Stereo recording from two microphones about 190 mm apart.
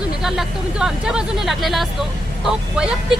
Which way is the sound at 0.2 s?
Centre (ahead or behind).